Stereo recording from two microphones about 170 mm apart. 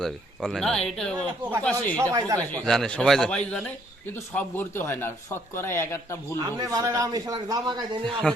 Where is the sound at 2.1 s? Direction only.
20° right (ahead or behind).